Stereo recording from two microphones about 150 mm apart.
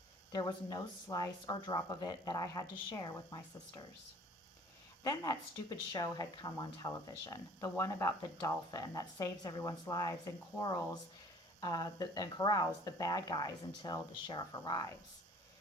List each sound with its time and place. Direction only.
0.3 s speech: 25° left (ahead or behind)
5.0 s speech: 25° left (ahead or behind)